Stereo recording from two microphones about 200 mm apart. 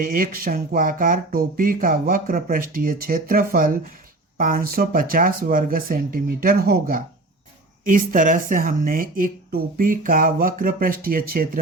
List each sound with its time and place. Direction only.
0.0 s speech: 45° right (ahead or behind)